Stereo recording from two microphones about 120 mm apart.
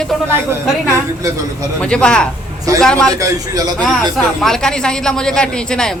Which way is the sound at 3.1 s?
30° right (ahead or behind).